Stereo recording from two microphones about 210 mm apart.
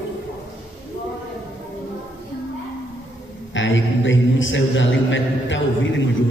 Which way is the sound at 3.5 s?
60° left (ahead or behind).